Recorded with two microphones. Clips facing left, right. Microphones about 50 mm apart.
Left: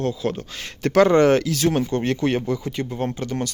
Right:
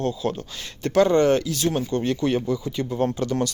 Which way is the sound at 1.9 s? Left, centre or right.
Left.